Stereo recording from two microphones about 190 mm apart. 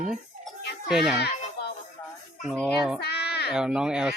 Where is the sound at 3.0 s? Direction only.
60° left (ahead or behind).